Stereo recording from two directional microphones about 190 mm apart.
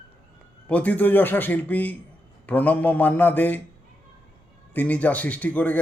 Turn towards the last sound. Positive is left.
turn(degrees=10)  # may be behind; listen again after turning